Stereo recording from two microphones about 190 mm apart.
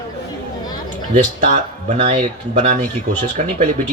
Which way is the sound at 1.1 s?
40° right (ahead or behind).